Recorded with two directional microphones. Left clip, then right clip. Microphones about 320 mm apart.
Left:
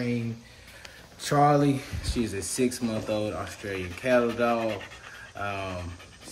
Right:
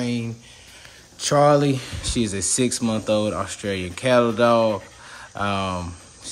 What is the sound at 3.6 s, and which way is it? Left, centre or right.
Speech, right.